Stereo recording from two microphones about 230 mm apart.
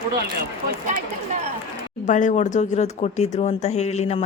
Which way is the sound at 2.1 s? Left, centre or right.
Left.